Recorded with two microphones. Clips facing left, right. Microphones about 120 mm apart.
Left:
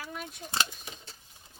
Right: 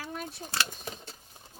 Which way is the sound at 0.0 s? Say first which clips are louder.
Right 2 dB; 35° right (ahead or behind).